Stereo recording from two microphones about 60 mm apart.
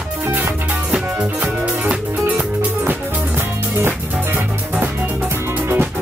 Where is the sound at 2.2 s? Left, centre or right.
Right.